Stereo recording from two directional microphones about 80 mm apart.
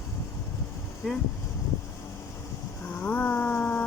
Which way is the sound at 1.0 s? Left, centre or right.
Centre.